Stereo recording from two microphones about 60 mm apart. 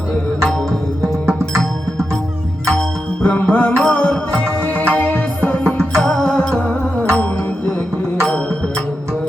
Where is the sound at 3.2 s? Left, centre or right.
Left.